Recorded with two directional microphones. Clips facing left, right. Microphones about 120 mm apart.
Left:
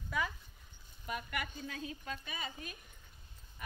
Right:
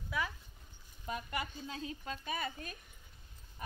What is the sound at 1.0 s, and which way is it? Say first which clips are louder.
Speech: right 1 dB; 30° right (ahead or behind).